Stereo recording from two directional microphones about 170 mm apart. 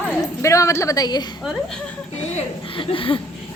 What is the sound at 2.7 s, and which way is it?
Chuckle, 30° left (ahead or behind).